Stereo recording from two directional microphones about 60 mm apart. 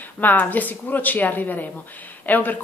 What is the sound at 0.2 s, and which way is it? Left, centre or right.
Speech, left.